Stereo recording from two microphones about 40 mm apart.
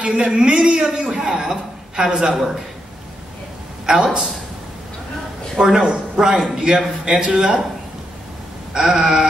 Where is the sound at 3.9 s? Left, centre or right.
Centre.